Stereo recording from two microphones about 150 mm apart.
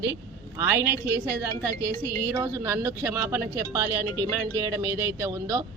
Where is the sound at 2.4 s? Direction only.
15° right (ahead or behind).